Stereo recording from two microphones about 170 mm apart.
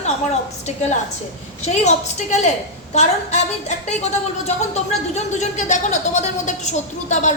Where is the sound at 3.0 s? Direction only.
45° left (ahead or behind).